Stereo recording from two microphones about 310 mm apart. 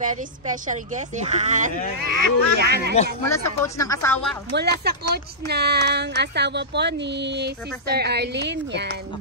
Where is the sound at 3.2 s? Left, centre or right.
Centre.